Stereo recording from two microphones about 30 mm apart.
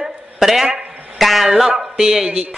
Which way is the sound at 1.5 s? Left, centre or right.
Centre.